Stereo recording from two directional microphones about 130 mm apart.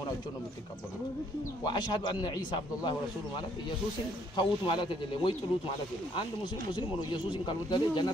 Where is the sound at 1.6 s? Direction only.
35° left (ahead or behind).